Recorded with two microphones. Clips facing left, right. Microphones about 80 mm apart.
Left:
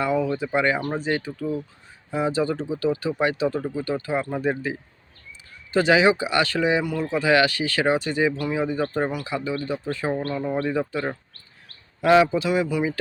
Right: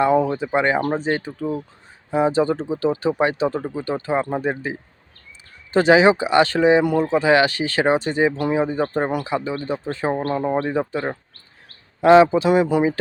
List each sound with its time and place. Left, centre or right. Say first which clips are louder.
0.3 s a man's voice: right 3 dB; right
2.0 s a man's voice: right 5 dB; right